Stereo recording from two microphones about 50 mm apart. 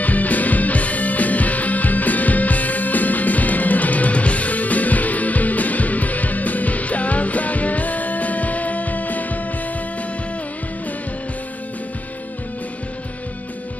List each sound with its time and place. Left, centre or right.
0.0 s music: left